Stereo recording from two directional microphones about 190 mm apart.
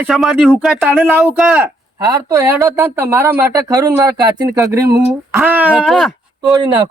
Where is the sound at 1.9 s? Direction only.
20° right (ahead or behind); by 6.1 s centre (ahead or behind).